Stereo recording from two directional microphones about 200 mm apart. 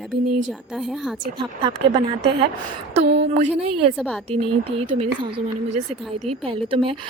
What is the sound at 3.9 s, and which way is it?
Speech, centre (ahead or behind).